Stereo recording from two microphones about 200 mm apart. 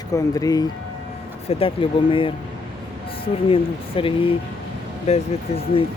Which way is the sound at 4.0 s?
25° left (ahead or behind).